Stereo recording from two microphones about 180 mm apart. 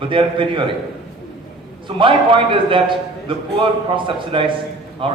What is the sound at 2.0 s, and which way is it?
A man's voice, 30° right (ahead or behind).